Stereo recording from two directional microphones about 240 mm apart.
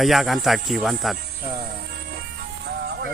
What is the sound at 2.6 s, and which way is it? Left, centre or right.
Music, right.